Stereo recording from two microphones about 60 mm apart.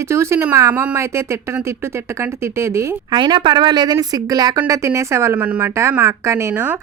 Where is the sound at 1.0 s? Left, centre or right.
Right.